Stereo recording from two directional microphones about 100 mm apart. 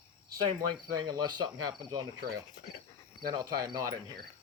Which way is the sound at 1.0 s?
45° right (ahead or behind).